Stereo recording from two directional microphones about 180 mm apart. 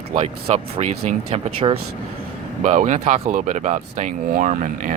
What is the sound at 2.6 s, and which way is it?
Speech, 40° right (ahead or behind).